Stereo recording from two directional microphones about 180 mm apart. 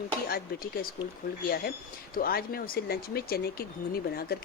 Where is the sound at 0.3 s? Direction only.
55° left (ahead or behind).